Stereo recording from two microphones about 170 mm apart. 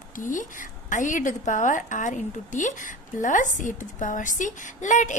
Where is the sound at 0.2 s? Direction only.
50° left (ahead or behind).